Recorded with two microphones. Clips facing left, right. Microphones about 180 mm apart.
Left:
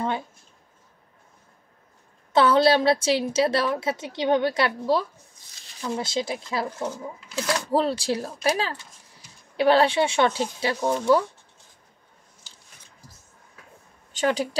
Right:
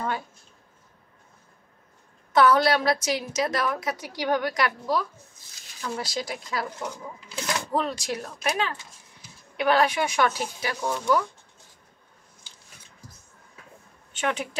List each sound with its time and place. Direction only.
2.3 s a woman's voice: 25° left (ahead or behind)
14.1 s speech: 35° left (ahead or behind)